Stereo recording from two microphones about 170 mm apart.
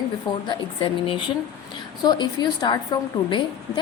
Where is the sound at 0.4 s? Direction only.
30° left (ahead or behind).